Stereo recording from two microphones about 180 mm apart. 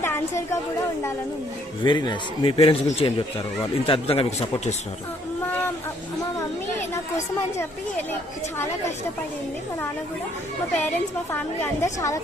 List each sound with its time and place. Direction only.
0.0 s a sound: 15° left (ahead or behind)
1.8 s a man's voice: 25° left (ahead or behind)
10.8 s a woman's voice: 10° left (ahead or behind)